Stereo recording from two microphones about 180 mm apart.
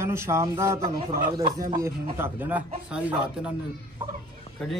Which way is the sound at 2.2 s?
10° right (ahead or behind).